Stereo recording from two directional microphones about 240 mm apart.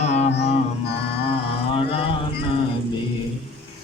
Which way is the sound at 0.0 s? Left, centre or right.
Left.